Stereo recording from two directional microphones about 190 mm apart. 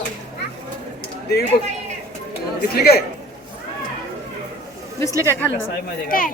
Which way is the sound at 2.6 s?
55° left (ahead or behind).